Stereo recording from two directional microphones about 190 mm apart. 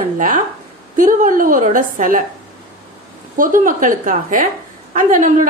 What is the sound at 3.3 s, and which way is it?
A woman's voice, 45° right (ahead or behind).